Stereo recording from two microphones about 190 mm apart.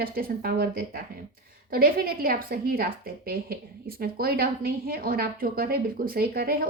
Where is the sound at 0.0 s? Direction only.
50° right (ahead or behind).